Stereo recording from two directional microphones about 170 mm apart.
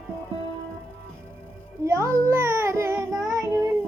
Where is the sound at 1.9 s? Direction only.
15° right (ahead or behind).